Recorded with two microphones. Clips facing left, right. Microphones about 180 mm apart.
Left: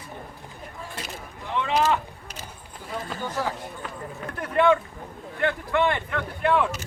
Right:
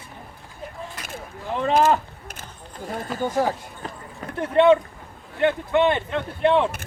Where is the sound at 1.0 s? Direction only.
30° left (ahead or behind).